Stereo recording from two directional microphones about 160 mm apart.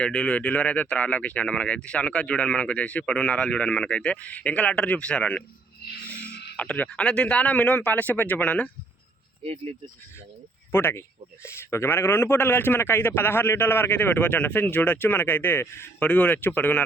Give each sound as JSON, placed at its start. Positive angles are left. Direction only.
{"t": 0.0, "sound": "speech", "side_deg": 5}
{"t": 6.2, "sound": "a sound", "side_deg": 90}
{"t": 6.6, "sound": "speech", "side_deg": 10}
{"t": 9.4, "sound": "speech", "side_deg": -40}
{"t": 10.7, "sound": "speech", "side_deg": 15}